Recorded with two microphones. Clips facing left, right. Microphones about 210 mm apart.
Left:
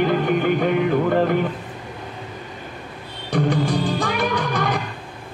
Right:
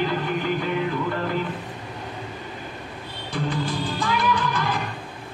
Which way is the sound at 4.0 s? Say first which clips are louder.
Left 2 dB; 65° left (ahead or behind).